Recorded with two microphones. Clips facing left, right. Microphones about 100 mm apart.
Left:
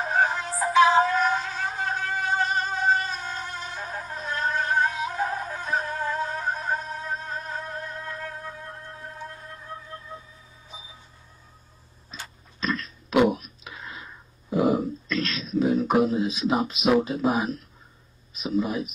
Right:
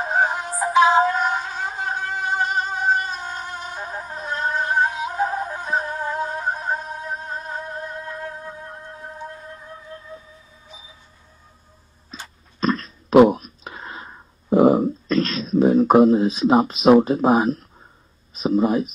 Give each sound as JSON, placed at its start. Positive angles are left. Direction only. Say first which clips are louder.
{"t": 0.0, "sound": "music", "louder": "right 3 dB", "side_deg": -20}
{"t": 12.5, "sound": "throat clearing", "louder": "right 7 dB", "side_deg": -40}
{"t": 18.3, "sound": "speech", "louder": "right 7 dB", "side_deg": -40}